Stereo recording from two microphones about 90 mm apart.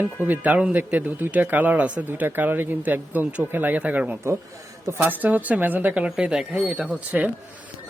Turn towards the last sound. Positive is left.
turn(degrees=-15)  # may be behind; listen again after turning